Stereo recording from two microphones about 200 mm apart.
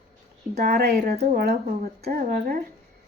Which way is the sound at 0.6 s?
50° right (ahead or behind).